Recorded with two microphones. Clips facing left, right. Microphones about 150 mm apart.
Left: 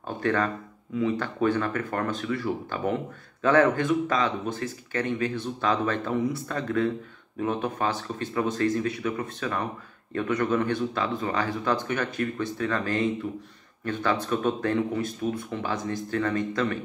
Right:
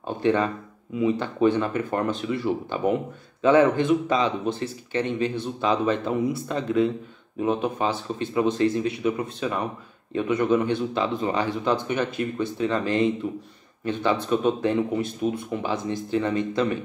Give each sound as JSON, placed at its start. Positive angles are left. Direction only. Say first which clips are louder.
{"t": 0.2, "sound": "speech", "louder": "right 4 dB", "side_deg": -15}